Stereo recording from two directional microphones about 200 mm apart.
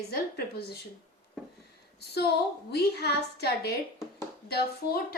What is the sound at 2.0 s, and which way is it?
A woman's voice, 55° left (ahead or behind).